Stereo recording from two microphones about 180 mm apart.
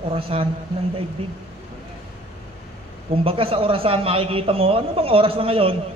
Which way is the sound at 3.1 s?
30° right (ahead or behind).